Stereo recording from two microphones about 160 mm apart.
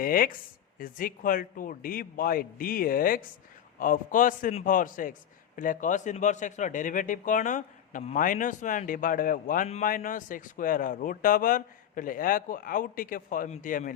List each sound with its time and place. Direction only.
0.0 s a man's voice: 65° left (ahead or behind)